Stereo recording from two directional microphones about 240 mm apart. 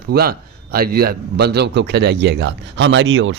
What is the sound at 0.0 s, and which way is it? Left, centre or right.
A man's voice, right.